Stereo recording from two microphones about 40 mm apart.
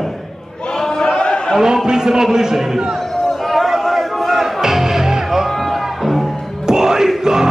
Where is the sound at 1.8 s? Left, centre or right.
Centre.